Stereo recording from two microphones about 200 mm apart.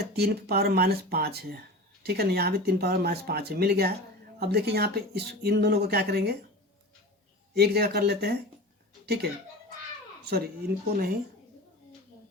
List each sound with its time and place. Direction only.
0.0 s speech: 50° right (ahead or behind)
7.5 s speech: 55° right (ahead or behind)
10.2 s speech: 50° right (ahead or behind)